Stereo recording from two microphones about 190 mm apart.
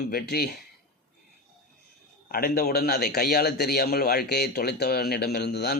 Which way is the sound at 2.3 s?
55° left (ahead or behind).